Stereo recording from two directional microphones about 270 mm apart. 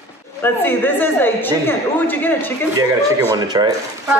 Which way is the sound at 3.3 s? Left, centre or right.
Centre.